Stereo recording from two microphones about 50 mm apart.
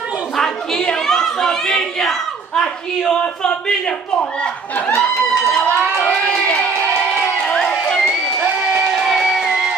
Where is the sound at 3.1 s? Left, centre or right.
Left.